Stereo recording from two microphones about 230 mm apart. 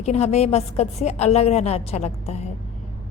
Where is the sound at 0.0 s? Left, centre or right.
Left.